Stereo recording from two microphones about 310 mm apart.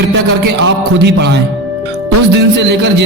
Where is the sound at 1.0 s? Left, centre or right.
Right.